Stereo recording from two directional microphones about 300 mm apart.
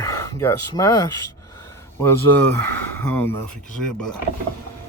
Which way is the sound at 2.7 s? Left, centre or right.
Centre.